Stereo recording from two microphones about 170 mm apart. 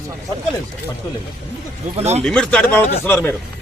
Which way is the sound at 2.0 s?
40° right (ahead or behind).